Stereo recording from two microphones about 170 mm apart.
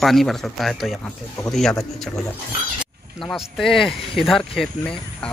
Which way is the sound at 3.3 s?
Centre (ahead or behind).